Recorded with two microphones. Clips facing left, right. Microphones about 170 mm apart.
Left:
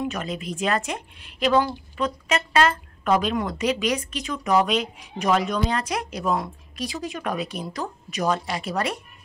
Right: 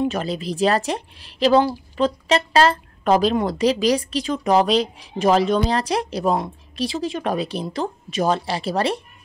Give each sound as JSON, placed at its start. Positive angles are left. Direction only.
{"t": 0.0, "sound": "speech", "side_deg": -30}